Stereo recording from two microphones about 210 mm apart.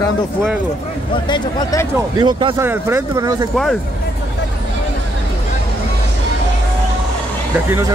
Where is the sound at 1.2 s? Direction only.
20° left (ahead or behind).